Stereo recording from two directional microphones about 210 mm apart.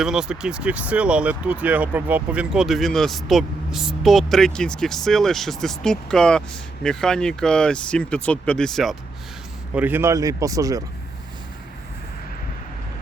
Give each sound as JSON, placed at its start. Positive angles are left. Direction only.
{"t": 0.0, "sound": "speech", "side_deg": 0}